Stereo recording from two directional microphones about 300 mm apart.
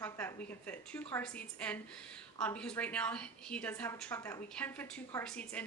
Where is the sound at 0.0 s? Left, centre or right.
Centre.